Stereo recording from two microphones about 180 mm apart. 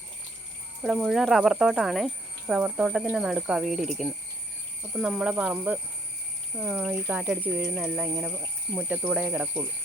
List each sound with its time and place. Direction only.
0.8 s speech: centre (ahead or behind)